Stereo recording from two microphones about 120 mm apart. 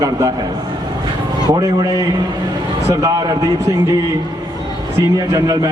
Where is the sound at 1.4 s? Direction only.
35° right (ahead or behind).